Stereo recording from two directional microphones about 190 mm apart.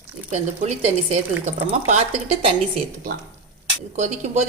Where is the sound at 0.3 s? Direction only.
40° right (ahead or behind).